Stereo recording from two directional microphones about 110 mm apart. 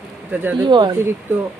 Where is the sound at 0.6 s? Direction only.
40° right (ahead or behind).